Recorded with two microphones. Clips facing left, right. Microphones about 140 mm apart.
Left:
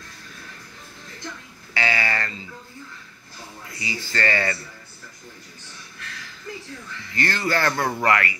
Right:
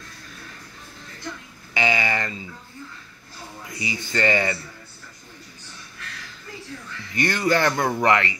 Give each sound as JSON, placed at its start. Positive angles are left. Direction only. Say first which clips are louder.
{"t": 1.7, "sound": "speech", "louder": "right 2 dB", "side_deg": -20}
{"t": 3.6, "sound": "speech", "louder": "right 2 dB", "side_deg": -20}
{"t": 7.2, "sound": "speech", "louder": "right 3 dB", "side_deg": -15}